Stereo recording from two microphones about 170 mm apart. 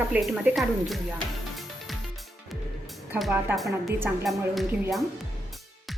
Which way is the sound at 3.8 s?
15° right (ahead or behind).